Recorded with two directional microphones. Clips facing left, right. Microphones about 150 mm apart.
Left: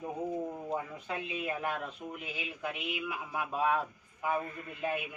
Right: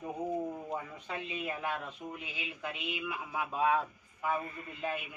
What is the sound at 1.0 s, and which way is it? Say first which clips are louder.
Speech: left 2 dB; 5° left (ahead or behind).